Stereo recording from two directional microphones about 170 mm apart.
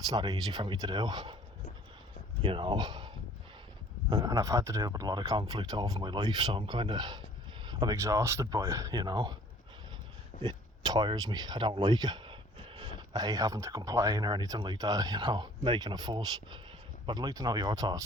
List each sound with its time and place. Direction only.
0.1 s speech: 25° right (ahead or behind)
2.4 s speech: 30° right (ahead or behind)
4.1 s speech: 20° right (ahead or behind)
10.4 s speech: 25° right (ahead or behind)